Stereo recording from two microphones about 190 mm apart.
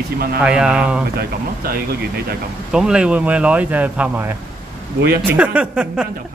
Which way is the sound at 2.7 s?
5° right (ahead or behind).